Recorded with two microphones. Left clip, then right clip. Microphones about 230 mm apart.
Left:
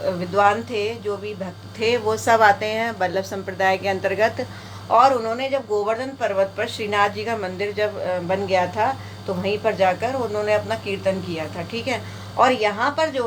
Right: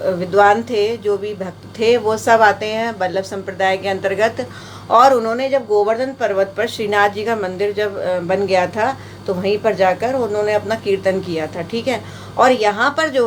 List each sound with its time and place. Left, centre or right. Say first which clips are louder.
0.0 s speech: right 5 dB; right
1.8 s a woman's voice: right 6 dB; centre
4.9 s speech: right 5 dB; right